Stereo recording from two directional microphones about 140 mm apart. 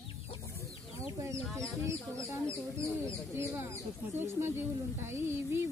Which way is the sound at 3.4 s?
20° right (ahead or behind).